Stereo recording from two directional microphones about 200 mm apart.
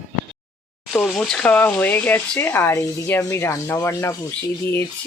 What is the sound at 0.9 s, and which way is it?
Speech, 5° left (ahead or behind).